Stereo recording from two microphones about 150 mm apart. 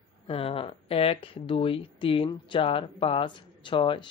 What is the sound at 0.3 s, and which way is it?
Speech, 40° left (ahead or behind).